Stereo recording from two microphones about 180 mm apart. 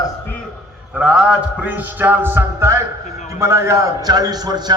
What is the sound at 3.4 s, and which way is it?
A man's voice, 15° right (ahead or behind).